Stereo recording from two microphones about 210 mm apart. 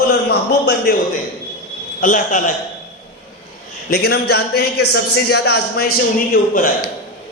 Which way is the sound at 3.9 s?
50° left (ahead or behind).